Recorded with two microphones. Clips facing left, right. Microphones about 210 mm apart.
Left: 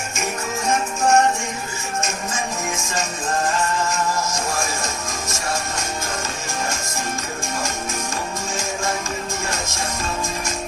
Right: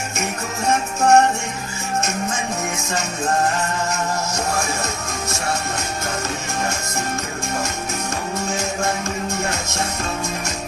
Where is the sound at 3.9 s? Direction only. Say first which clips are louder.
Even; 65° right (ahead or behind).